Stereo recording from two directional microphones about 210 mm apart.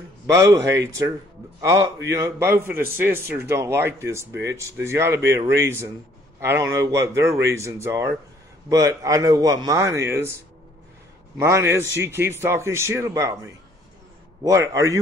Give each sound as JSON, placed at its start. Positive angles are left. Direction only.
{"t": 0.3, "sound": "a man's voice", "side_deg": -15}
{"t": 14.4, "sound": "a man's voice", "side_deg": -15}